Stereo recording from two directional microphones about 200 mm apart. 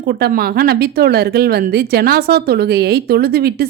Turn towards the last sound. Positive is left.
turn(degrees=-50)  # may be behind; listen again after turning